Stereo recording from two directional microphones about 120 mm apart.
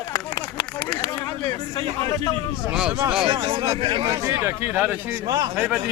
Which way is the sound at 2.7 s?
5° right (ahead or behind).